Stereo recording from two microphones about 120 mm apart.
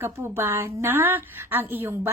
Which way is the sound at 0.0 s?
20° right (ahead or behind).